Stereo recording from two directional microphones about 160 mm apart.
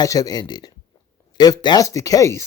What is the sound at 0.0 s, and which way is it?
Speech, 25° left (ahead or behind).